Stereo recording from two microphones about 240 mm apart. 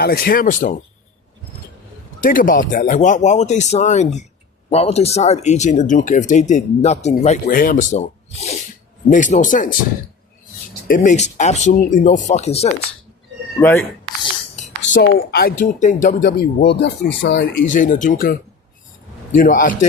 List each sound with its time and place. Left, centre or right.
0.0 s speech: left
2.2 s speech: left
10.8 s speech: left
13.6 s speech: centre
14.9 s speech: left
17.7 s speech: left